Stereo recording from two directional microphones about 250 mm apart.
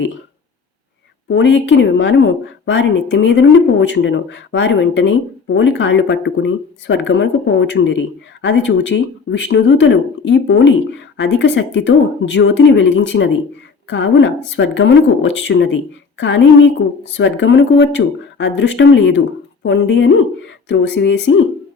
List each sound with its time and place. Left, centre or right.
1.3 s a woman's voice: left